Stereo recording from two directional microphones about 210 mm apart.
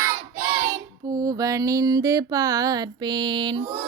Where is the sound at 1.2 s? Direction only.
15° right (ahead or behind).